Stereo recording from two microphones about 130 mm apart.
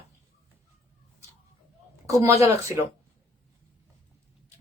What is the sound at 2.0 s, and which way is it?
Speech, 25° right (ahead or behind).